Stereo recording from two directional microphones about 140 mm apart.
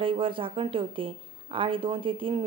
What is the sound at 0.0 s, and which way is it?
A woman's voice, 40° right (ahead or behind).